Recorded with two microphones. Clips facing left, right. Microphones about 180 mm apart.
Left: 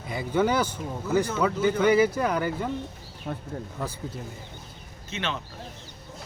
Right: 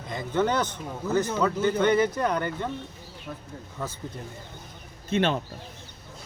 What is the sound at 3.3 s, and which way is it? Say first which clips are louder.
Speech: left 5 dB; 65° left (ahead or behind).